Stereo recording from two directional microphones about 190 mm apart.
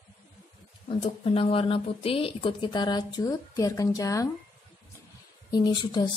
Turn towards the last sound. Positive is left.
turn(degrees=20)  # may be behind; listen again after turning